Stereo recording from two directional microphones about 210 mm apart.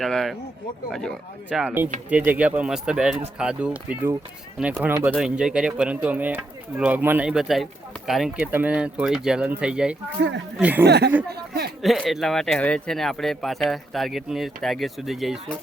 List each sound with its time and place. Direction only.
0.0 s speech: centre (ahead or behind)
10.8 s speech: 50° right (ahead or behind)
11.8 s speech: centre (ahead or behind)